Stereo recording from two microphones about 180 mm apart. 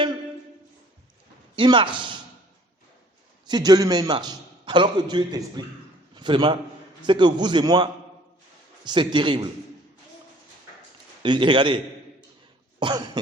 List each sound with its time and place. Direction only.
1.5 s a man's voice: 25° right (ahead or behind)
3.4 s a man's voice: 25° right (ahead or behind)
11.2 s a man's voice: 25° right (ahead or behind)